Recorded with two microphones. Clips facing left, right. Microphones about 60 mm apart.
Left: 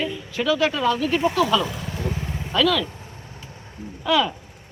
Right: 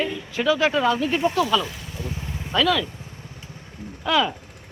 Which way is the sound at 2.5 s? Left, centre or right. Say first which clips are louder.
Even; centre.